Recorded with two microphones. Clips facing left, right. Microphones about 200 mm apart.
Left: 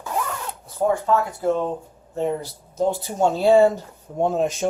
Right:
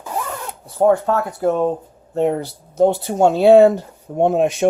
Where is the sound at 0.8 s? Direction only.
65° right (ahead or behind).